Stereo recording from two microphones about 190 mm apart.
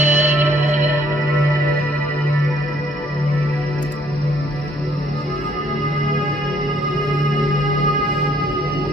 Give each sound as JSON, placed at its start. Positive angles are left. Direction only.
{"t": 0.0, "sound": "music", "side_deg": -40}